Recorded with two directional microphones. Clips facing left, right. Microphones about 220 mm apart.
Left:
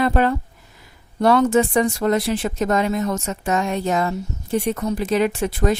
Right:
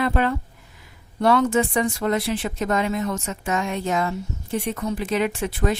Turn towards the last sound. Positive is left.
turn(degrees=40)  # may be behind; listen again after turning